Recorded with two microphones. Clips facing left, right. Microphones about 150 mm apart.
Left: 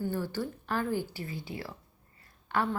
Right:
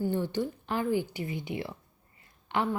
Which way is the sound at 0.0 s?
20° right (ahead or behind).